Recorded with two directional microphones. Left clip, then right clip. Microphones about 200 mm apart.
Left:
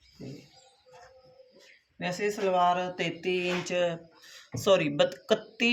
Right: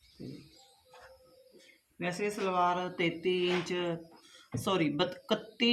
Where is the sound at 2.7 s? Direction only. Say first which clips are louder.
Left 2 dB; 40° left (ahead or behind).